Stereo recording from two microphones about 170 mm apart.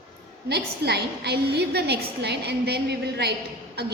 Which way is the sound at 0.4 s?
75° right (ahead or behind).